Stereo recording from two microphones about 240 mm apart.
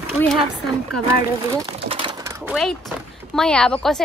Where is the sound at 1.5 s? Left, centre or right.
Centre.